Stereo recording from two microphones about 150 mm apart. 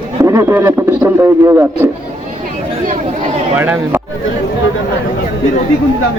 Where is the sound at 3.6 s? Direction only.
15° right (ahead or behind).